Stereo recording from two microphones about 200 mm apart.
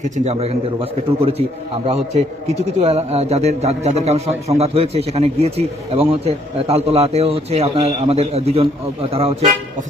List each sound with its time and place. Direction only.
0.3 s a man's voice: 30° right (ahead or behind)
2.7 s a man's voice: 30° right (ahead or behind)